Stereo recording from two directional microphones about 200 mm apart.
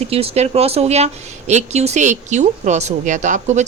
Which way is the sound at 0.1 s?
30° right (ahead or behind).